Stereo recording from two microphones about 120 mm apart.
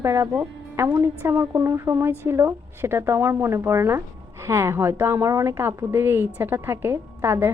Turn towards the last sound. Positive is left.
turn(degrees=-20)  # may be behind; listen again after turning